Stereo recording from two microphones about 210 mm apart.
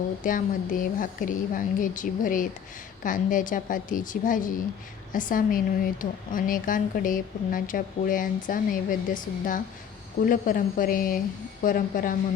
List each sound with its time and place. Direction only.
0.2 s speech: 40° left (ahead or behind)